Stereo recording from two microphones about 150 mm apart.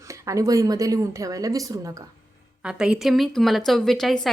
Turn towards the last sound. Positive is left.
turn(degrees=0)  # may be behind; listen again after turning